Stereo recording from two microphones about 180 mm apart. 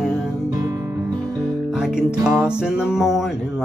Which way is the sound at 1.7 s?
5° right (ahead or behind).